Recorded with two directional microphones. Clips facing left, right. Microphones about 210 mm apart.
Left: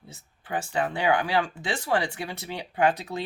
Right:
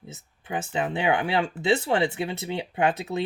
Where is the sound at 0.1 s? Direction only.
20° right (ahead or behind).